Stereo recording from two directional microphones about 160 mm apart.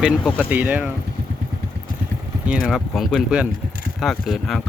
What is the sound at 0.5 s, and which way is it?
Speech, 10° right (ahead or behind).